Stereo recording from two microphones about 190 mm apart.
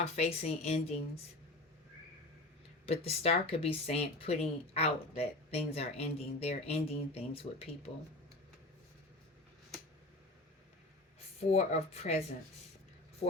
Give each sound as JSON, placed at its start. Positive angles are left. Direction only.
{"t": 0.0, "sound": "speech", "side_deg": 35}
{"t": 2.8, "sound": "speech", "side_deg": 30}
{"t": 11.4, "sound": "speech", "side_deg": 35}